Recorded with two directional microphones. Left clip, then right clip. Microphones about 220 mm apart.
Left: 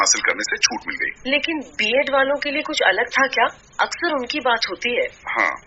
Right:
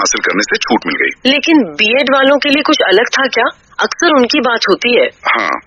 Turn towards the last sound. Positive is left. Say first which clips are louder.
# right 9 dB
turn(degrees=-45)  # may be behind; listen again after turning